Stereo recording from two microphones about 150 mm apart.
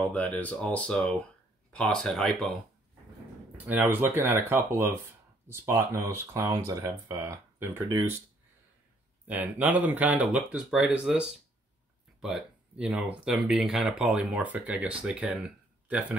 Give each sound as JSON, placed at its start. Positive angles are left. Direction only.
{"t": 0.1, "sound": "speech", "side_deg": 10}
{"t": 3.6, "sound": "speech", "side_deg": -10}
{"t": 9.3, "sound": "speech", "side_deg": -10}